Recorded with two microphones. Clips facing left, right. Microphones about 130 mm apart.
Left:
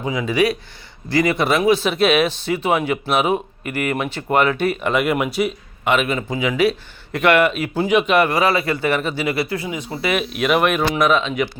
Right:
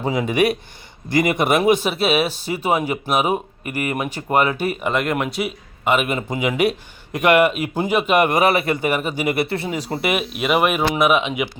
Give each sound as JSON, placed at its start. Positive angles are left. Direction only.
{"t": 0.0, "sound": "speech", "side_deg": -35}
{"t": 0.3, "sound": "speech", "side_deg": -55}
{"t": 1.0, "sound": "speech", "side_deg": -20}
{"t": 1.9, "sound": "speech", "side_deg": -5}
{"t": 4.8, "sound": "speech", "side_deg": 0}
{"t": 9.6, "sound": "speech", "side_deg": -40}
{"t": 10.2, "sound": "speech", "side_deg": -5}